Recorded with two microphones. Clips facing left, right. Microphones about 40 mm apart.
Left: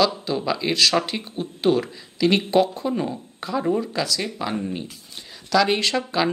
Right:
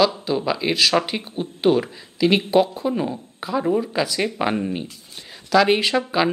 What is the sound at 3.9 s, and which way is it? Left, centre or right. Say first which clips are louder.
Speech: right 4 dB; right.